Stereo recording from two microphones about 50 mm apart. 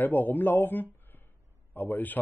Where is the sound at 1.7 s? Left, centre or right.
Centre.